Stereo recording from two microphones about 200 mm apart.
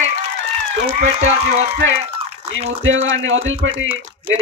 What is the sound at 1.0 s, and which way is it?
Speech, 35° right (ahead or behind).